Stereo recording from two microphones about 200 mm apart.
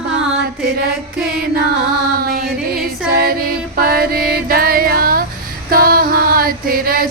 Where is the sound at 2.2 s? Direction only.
50° right (ahead or behind).